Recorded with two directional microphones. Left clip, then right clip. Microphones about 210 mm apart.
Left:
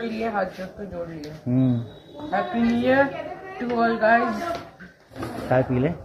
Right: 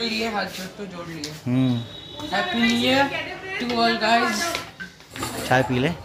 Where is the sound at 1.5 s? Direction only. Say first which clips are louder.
Even; 20° right (ahead or behind).